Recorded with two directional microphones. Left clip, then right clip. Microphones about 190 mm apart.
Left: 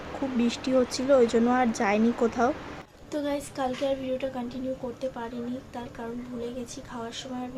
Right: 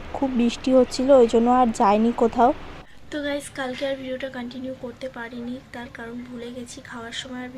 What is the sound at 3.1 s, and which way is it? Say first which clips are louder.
A woman's voice: right 3 dB; 5° left (ahead or behind).